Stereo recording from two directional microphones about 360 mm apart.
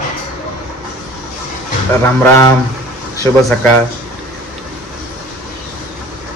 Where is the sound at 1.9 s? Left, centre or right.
Centre.